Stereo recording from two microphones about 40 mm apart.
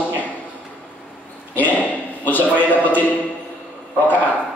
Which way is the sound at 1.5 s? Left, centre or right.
Left.